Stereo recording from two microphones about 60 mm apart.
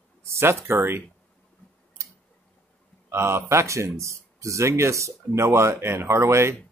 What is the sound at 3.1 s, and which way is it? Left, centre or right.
Speech, right.